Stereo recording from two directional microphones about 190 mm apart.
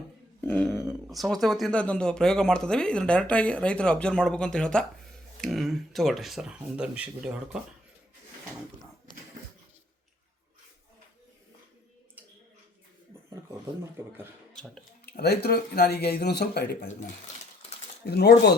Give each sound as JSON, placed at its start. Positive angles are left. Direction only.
{"t": 0.4, "sound": "speech", "side_deg": 5}
{"t": 14.5, "sound": "speech", "side_deg": 5}
{"t": 15.0, "sound": "speech", "side_deg": 55}
{"t": 18.0, "sound": "speech", "side_deg": 60}